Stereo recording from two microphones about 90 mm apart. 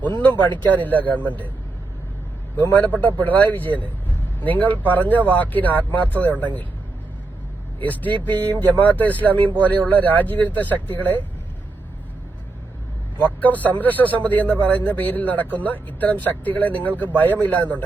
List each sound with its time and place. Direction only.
0.2 s speech: 15° left (ahead or behind)
2.6 s a man's voice: 20° left (ahead or behind)
7.8 s speech: 20° left (ahead or behind)
13.4 s speech: 20° left (ahead or behind)